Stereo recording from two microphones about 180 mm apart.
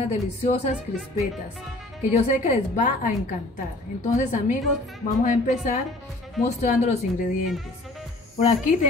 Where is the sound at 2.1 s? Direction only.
45° left (ahead or behind).